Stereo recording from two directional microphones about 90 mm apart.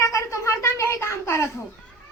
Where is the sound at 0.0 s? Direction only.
35° left (ahead or behind).